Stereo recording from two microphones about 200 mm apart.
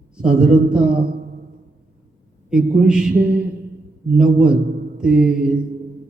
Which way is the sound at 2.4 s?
5° right (ahead or behind).